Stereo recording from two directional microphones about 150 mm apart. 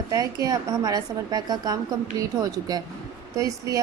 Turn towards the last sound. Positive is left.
turn(degrees=-20)  # may be behind; listen again after turning